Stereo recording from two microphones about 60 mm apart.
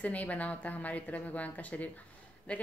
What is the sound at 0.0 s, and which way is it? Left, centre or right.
A woman's voice, left.